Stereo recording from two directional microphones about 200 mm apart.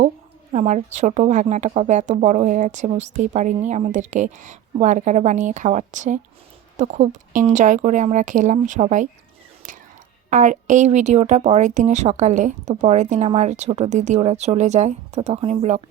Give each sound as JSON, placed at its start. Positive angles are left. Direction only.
{"t": 0.5, "sound": "a woman's voice", "side_deg": -35}
{"t": 10.2, "sound": "a woman's voice", "side_deg": -40}